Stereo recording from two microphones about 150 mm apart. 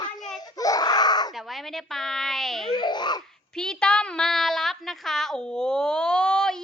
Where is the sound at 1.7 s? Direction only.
Centre (ahead or behind).